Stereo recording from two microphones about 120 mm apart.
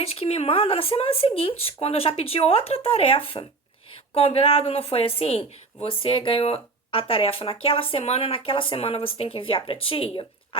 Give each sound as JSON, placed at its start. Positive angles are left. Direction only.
{"t": 0.0, "sound": "a woman's voice", "side_deg": 55}